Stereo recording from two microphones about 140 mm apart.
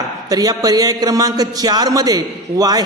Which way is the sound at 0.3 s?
25° right (ahead or behind).